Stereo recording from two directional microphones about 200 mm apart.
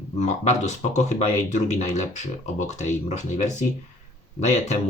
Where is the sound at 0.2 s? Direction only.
35° left (ahead or behind).